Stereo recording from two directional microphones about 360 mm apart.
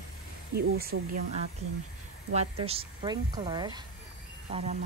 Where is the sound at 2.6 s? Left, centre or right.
Centre.